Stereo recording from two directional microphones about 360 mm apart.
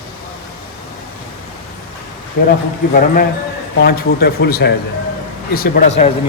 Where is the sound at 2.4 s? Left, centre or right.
Left.